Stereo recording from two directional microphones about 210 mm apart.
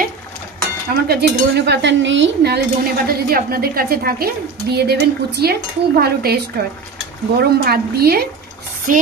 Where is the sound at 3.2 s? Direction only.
45° right (ahead or behind).